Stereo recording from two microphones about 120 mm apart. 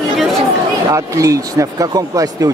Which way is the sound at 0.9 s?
25° right (ahead or behind).